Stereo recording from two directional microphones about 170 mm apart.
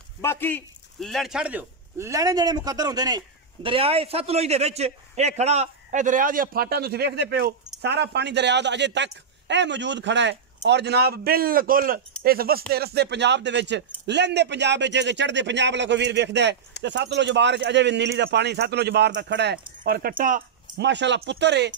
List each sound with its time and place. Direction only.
0.2 s a man's voice: 15° left (ahead or behind); by 19.6 s 80° right
19.8 s speech: 60° right (ahead or behind)
20.8 s speech: 90° right